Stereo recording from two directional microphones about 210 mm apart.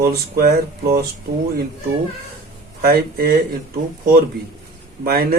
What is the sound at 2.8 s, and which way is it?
Speech, 45° right (ahead or behind).